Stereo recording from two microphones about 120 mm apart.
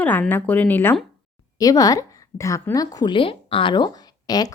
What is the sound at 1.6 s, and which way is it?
A woman's voice, 30° left (ahead or behind).